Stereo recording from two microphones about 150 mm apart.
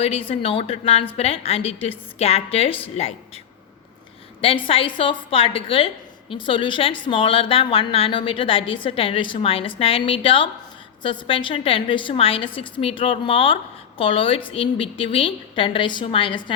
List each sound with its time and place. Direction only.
0.0 s a woman's voice: 40° left (ahead or behind)
4.4 s a woman's voice: 35° left (ahead or behind)